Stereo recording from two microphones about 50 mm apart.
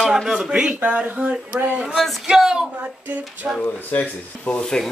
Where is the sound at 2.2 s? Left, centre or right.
Centre.